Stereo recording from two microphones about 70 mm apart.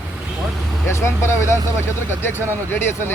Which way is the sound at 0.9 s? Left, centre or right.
Left.